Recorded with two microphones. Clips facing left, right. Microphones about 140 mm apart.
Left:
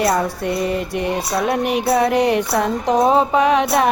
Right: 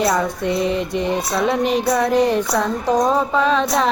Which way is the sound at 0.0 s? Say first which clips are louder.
Even; 5° left (ahead or behind).